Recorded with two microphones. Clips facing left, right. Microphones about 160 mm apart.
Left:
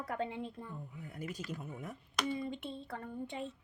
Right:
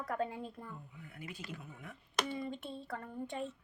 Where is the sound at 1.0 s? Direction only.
40° left (ahead or behind).